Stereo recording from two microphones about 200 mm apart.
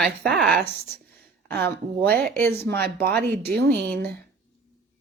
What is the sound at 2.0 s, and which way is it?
A woman's voice, 50° right (ahead or behind).